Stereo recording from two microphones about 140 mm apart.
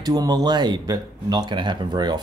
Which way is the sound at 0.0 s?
30° right (ahead or behind).